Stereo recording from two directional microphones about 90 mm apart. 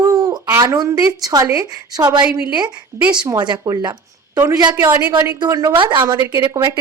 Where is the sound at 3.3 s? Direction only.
55° right (ahead or behind).